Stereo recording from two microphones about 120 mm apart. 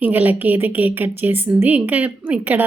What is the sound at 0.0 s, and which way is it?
A woman's voice, 15° right (ahead or behind).